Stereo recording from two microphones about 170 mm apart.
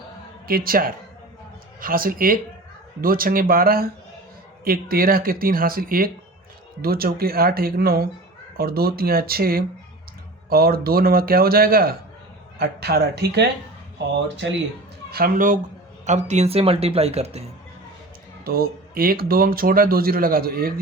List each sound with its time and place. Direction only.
0.4 s speech: 60° right (ahead or behind)
14.4 s speech: 85° right
15.1 s speech: 55° right (ahead or behind)
16.0 s speech: 45° right (ahead or behind)
18.4 s speech: 60° right (ahead or behind)